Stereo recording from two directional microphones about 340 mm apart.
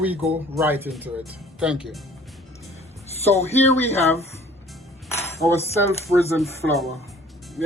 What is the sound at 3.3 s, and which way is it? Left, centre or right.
Speech, centre.